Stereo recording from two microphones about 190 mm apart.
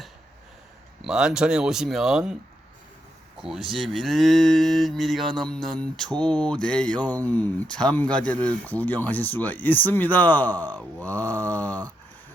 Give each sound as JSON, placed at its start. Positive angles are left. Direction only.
{"t": 1.0, "sound": "moo", "side_deg": -5}
{"t": 3.4, "sound": "moo", "side_deg": 0}
{"t": 6.1, "sound": "speech", "side_deg": 5}
{"t": 11.6, "sound": "a sound", "side_deg": -20}